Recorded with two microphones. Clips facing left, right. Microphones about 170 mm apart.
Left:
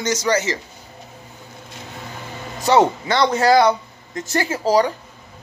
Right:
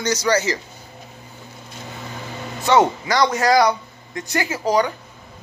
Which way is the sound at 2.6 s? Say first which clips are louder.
Left 1 dB; 30° left (ahead or behind).